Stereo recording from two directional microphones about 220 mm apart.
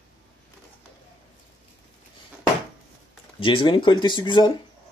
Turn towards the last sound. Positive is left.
turn(degrees=20)  # may be behind; listen again after turning